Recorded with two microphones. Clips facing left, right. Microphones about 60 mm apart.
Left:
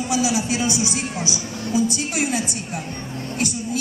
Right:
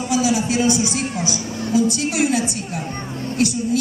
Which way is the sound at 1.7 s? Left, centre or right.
Centre.